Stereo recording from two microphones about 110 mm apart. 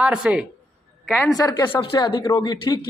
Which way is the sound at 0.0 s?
5° right (ahead or behind).